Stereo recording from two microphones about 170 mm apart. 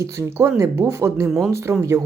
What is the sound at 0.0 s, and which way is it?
Speech, 15° right (ahead or behind).